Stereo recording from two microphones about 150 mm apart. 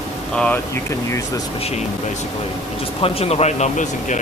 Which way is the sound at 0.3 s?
10° left (ahead or behind).